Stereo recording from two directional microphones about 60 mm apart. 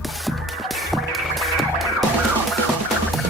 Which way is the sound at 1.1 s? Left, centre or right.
Centre.